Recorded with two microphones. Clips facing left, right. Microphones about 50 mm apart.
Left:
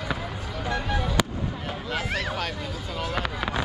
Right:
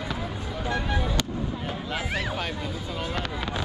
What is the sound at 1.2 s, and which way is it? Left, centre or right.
Fireworks, centre.